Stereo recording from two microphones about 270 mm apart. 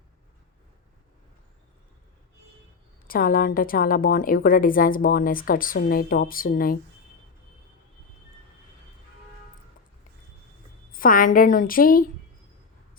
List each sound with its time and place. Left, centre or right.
3.1 s a woman's voice: left
10.9 s a woman's voice: left